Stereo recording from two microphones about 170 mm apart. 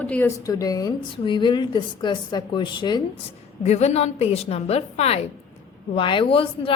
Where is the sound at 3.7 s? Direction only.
40° left (ahead or behind).